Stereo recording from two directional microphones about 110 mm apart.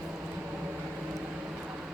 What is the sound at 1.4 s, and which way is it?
Vehicle, 10° right (ahead or behind).